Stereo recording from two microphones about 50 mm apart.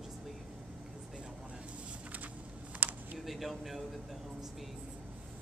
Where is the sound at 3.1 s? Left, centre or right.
Centre.